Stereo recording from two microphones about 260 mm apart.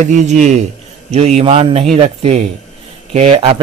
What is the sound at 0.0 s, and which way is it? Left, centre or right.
Speech, right.